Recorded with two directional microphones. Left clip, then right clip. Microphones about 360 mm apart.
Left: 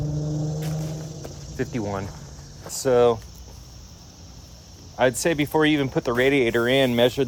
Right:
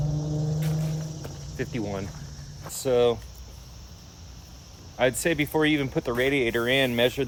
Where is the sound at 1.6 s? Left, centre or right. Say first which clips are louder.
Left 4 dB; centre.